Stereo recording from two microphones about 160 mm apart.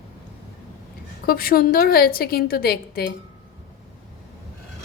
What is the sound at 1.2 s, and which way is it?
A woman's voice, 65° left (ahead or behind).